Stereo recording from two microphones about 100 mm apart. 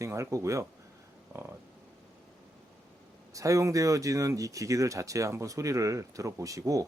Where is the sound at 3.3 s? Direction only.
35° right (ahead or behind).